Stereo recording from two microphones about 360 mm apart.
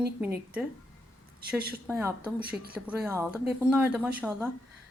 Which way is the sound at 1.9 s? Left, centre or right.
Centre.